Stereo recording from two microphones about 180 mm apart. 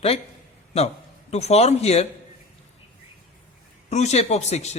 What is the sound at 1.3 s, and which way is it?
Speech, 35° left (ahead or behind).